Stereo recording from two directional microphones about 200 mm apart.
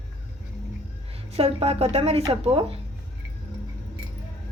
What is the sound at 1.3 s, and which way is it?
Speech, 30° right (ahead or behind).